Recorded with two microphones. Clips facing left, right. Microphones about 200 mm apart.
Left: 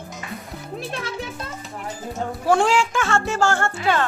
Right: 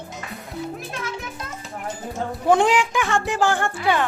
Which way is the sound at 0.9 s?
30° left (ahead or behind).